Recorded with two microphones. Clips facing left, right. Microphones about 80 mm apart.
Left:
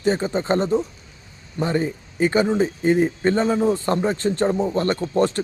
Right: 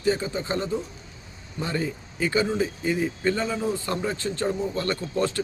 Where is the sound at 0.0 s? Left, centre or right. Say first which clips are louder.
Left 4 dB; left.